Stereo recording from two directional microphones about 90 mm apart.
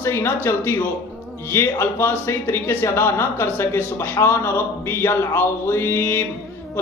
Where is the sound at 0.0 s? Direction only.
30° left (ahead or behind).